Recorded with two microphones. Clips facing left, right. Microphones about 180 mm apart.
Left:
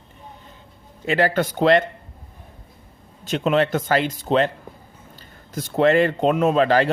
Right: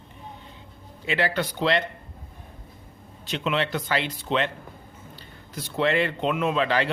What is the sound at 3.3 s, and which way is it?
A man's voice, 45° left (ahead or behind).